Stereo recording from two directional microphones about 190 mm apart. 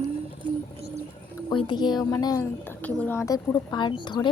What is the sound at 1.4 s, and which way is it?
A woman's voice, 25° left (ahead or behind).